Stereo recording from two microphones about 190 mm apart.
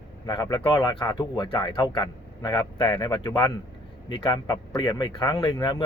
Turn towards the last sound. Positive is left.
turn(degrees=25)  # may be behind; listen again after turning